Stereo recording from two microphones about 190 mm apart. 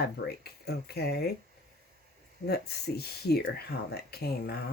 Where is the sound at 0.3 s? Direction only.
55° left (ahead or behind).